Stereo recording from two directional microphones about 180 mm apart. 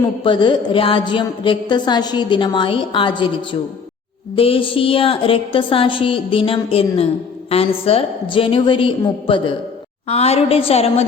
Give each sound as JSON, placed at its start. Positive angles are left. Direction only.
{"t": 0.3, "sound": "a woman's voice", "side_deg": 25}
{"t": 4.4, "sound": "a woman's voice", "side_deg": 30}